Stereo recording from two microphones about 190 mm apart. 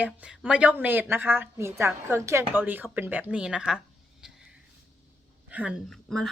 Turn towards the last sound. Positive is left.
turn(degrees=5)  # may be behind; listen again after turning